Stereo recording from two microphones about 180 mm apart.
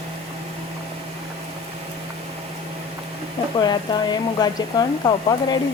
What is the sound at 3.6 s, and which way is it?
Speech, 25° left (ahead or behind).